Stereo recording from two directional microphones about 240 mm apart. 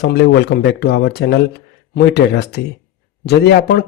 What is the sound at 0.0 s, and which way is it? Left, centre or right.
Speech, left.